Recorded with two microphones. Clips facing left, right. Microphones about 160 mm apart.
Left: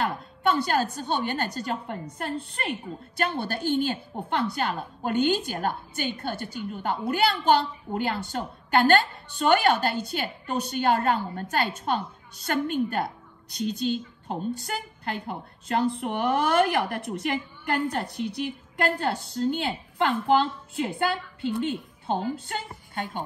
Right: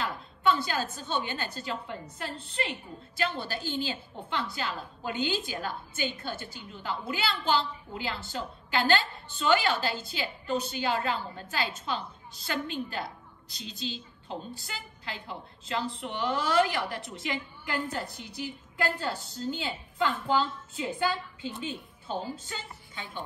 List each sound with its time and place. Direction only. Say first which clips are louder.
0.0 s a woman's voice: left 2 dB; 55° left (ahead or behind)
11.5 s a woman's voice: left 6 dB; 50° left (ahead or behind)
22.3 s a woman's voice: left 6 dB; 65° left (ahead or behind)